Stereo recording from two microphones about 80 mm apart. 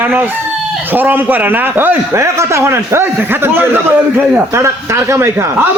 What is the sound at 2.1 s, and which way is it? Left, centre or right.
A man's voice, right.